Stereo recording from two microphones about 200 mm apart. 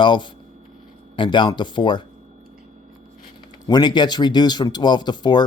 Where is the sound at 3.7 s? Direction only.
20° left (ahead or behind).